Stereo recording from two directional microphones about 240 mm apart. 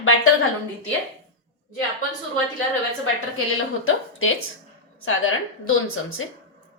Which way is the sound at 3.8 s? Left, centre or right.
Left.